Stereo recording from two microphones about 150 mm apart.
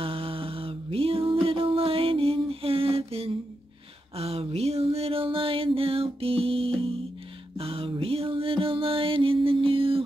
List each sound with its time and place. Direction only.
0.0 s music: 40° right (ahead or behind)
4.2 s a sound: 45° right (ahead or behind)
7.5 s music: 40° right (ahead or behind)